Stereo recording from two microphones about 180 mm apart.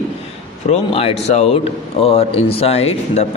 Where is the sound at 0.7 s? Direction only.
35° left (ahead or behind).